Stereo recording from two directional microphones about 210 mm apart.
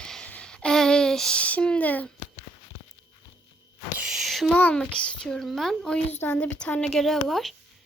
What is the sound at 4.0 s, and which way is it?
A woman's voice, centre (ahead or behind).